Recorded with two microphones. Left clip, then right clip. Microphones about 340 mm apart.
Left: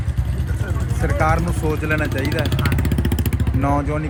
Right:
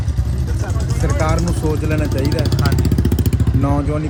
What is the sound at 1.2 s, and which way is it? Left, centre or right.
Speech, centre.